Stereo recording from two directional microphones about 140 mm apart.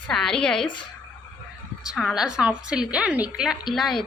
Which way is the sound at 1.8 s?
5° right (ahead or behind).